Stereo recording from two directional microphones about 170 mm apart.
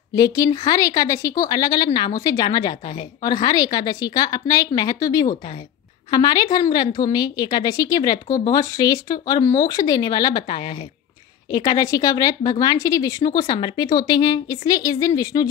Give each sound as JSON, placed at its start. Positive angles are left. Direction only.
{"t": 0.1, "sound": "speech", "side_deg": 20}